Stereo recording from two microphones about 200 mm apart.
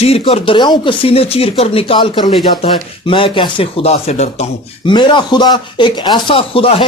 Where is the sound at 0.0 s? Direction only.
30° left (ahead or behind).